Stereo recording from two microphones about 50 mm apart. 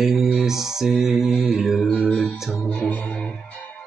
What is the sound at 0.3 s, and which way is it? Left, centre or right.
Mantra, centre.